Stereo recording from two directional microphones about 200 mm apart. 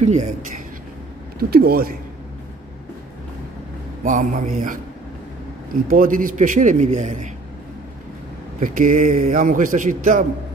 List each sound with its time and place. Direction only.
0.0 s a man's voice: 35° right (ahead or behind)
1.5 s a man's voice: 50° right (ahead or behind)
4.0 s a man's voice: 40° right (ahead or behind)
5.9 s a man's voice: 45° right (ahead or behind)
8.5 s a man's voice: 40° right (ahead or behind)